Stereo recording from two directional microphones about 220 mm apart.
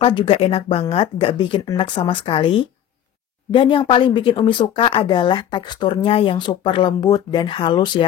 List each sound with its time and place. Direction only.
0.0 s speech: 25° left (ahead or behind)